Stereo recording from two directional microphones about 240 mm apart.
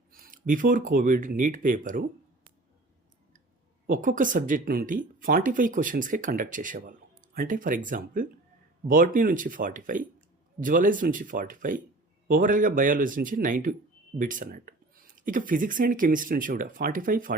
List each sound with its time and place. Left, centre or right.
0.1 s speech: right
3.8 s speech: right